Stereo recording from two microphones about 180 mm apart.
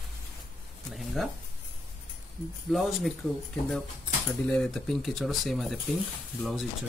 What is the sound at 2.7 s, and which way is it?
Speech, centre (ahead or behind).